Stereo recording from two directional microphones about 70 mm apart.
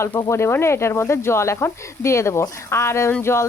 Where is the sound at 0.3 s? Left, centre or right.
Left.